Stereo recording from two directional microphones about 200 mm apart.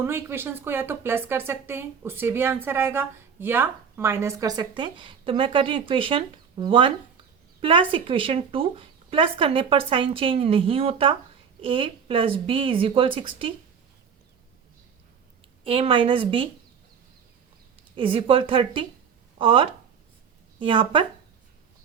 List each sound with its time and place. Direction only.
0.0 s speech: 10° right (ahead or behind)
15.6 s speech: 25° right (ahead or behind)
17.9 s speech: 25° right (ahead or behind)